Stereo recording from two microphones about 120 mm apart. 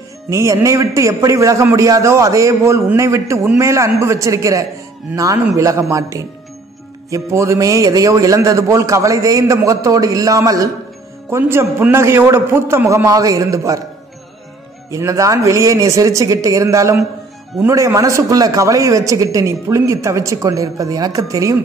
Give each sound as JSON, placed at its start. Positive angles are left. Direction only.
{"t": 0.3, "sound": "a man's voice", "side_deg": -25}
{"t": 14.9, "sound": "a man's voice", "side_deg": -25}